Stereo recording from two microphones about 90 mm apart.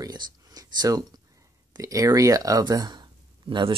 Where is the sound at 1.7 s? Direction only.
40° right (ahead or behind).